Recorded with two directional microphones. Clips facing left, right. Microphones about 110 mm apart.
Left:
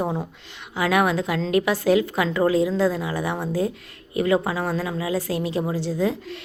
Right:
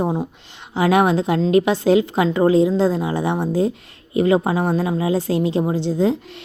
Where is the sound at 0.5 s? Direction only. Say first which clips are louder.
Right 5 dB; 30° right (ahead or behind).